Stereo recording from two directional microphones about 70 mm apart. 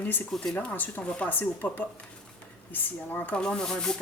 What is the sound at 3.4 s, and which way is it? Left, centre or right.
Speech, centre.